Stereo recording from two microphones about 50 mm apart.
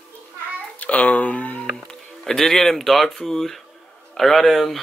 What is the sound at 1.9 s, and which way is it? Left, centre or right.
Speech, centre.